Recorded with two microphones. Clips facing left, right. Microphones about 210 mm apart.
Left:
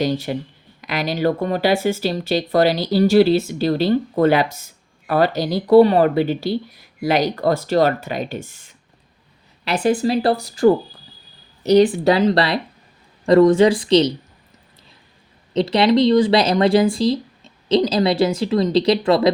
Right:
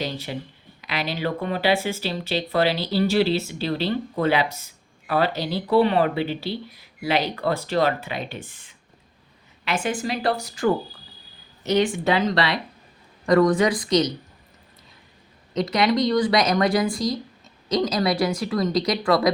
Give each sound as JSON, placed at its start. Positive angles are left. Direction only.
{"t": 0.3, "sound": "speech", "side_deg": 50}
{"t": 11.6, "sound": "speech", "side_deg": 35}
{"t": 15.5, "sound": "speech", "side_deg": 30}